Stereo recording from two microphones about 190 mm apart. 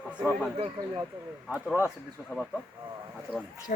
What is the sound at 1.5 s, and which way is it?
Speech, 5° right (ahead or behind).